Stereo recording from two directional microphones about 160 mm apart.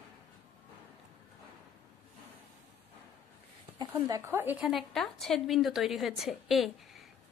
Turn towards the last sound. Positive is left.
turn(degrees=0)  # may be behind; listen again after turning